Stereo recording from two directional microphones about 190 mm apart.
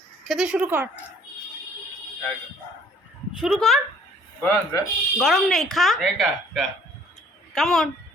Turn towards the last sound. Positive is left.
turn(degrees=0)  # may be behind; listen again after turning